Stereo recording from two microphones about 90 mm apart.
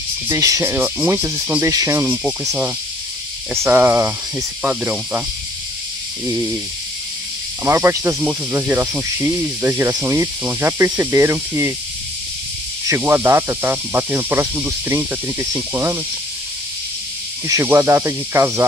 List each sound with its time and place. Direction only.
0.3 s speech: 35° right (ahead or behind)
0.7 s speech: 25° right (ahead or behind)
3.6 s speech: 25° right (ahead or behind)
7.6 s speech: 30° right (ahead or behind)
9.6 s speech: 30° right (ahead or behind)
12.8 s speech: 25° right (ahead or behind)
17.6 s speech: 30° right (ahead or behind)